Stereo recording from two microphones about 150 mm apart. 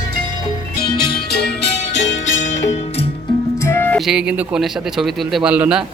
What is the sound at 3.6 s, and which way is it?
Music, 15° left (ahead or behind).